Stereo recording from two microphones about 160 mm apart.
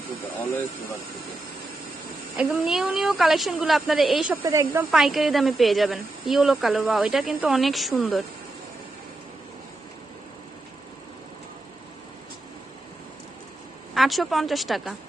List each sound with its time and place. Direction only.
2.3 s speech: centre (ahead or behind)
4.4 s speech: 15° right (ahead or behind)
4.9 s speech: centre (ahead or behind)
13.9 s speech: centre (ahead or behind)